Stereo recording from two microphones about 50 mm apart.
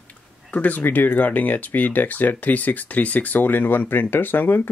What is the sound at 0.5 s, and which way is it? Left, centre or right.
Speech, left.